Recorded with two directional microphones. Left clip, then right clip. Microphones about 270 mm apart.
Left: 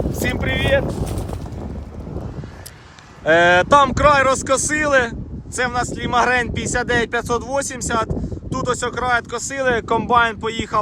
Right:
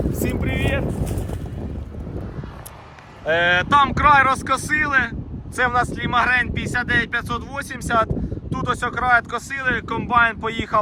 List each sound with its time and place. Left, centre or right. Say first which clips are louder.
0.2 s vehicle: left 7 dB; centre
3.2 s speech: left 5 dB; left; by 10.8 s centre